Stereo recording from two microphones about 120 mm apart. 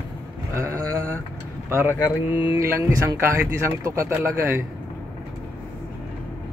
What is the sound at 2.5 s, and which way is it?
Speech, 20° right (ahead or behind).